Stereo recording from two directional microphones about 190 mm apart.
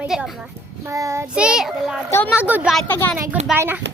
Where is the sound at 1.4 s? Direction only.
5° right (ahead or behind).